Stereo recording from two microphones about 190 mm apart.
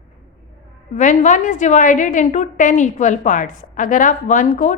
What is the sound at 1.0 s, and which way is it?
A woman's voice, 40° left (ahead or behind).